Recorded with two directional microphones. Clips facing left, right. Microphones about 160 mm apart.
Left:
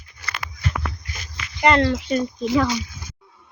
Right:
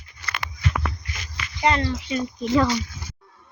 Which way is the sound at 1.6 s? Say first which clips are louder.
Left 5 dB; 75° left (ahead or behind).